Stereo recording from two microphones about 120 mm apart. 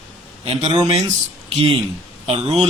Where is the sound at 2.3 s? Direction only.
55° right (ahead or behind).